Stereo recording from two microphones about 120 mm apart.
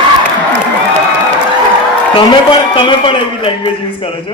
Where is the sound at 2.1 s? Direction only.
40° left (ahead or behind).